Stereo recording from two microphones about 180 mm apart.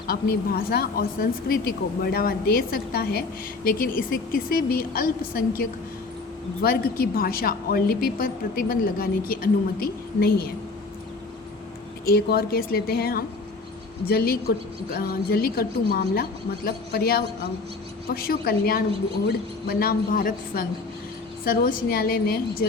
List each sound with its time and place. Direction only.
0.1 s speech: 60° left (ahead or behind)
12.0 s a man's voice: 60° left (ahead or behind)